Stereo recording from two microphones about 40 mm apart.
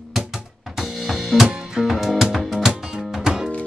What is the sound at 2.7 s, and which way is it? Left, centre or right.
Music, centre.